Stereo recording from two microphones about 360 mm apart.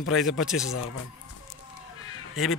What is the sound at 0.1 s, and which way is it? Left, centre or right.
Speech, centre.